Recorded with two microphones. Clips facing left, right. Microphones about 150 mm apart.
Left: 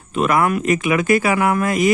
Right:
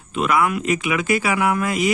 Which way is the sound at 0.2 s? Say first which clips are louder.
Left 2 dB; 45° left (ahead or behind).